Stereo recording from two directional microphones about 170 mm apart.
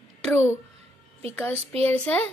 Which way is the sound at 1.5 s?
35° right (ahead or behind).